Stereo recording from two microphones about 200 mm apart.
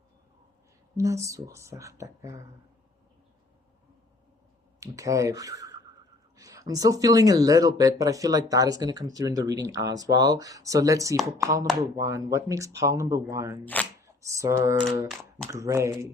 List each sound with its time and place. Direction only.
0.9 s speech: 15° right (ahead or behind)
4.8 s speech: 15° right (ahead or behind)